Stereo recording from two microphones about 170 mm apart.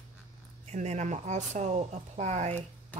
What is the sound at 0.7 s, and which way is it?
Speech, 40° right (ahead or behind).